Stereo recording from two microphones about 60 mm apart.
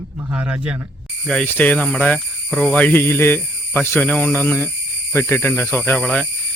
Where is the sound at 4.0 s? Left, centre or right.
Left.